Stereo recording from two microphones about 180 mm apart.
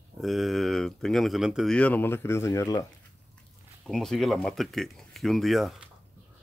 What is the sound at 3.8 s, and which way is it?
Speech, centre (ahead or behind).